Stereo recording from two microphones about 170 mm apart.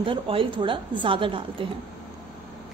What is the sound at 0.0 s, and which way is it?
A woman's voice, 30° right (ahead or behind).